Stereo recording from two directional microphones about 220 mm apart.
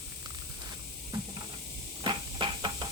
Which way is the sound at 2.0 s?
20° right (ahead or behind).